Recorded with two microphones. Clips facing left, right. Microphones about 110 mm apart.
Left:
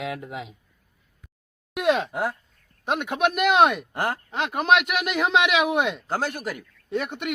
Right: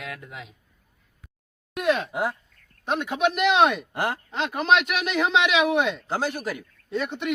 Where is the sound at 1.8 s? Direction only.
20° left (ahead or behind).